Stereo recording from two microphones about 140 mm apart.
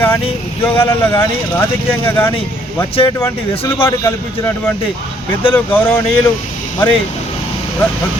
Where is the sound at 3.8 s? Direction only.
20° left (ahead or behind).